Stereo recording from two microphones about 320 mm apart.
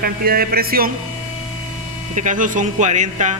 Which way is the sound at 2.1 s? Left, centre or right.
Right.